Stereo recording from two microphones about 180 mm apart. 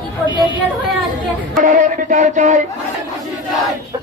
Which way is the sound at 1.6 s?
45° right (ahead or behind).